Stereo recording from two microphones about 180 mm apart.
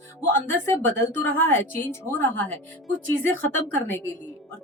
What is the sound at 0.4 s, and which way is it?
Speech, 10° left (ahead or behind).